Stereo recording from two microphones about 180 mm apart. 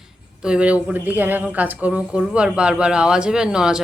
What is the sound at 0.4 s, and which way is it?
A woman's voice, 5° right (ahead or behind).